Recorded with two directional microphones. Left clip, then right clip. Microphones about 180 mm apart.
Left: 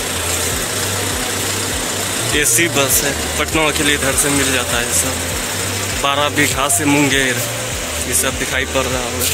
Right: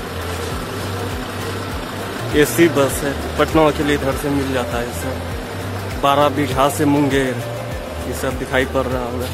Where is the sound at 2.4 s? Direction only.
15° right (ahead or behind).